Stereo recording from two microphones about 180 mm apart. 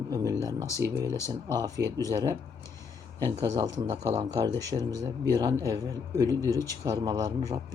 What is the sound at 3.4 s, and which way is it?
Speech, 20° right (ahead or behind).